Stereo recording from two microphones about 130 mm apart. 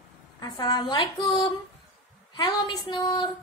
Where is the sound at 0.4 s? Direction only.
35° left (ahead or behind).